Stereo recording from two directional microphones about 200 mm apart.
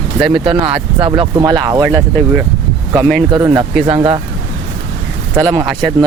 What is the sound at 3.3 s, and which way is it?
Speech, 20° right (ahead or behind).